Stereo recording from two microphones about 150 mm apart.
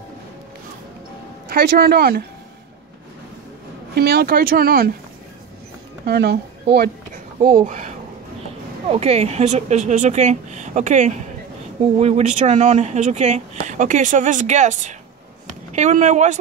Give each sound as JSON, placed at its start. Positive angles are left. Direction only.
{"t": 1.5, "sound": "speech", "side_deg": -90}
{"t": 3.9, "sound": "speech", "side_deg": -90}
{"t": 6.0, "sound": "a woman's voice", "side_deg": -90}
{"t": 7.4, "sound": "speech", "side_deg": -65}
{"t": 8.9, "sound": "speech", "side_deg": -45}